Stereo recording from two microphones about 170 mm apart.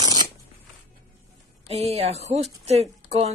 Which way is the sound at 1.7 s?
35° right (ahead or behind).